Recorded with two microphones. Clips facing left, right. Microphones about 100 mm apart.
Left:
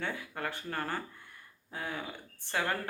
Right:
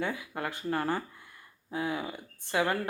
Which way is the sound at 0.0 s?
15° right (ahead or behind).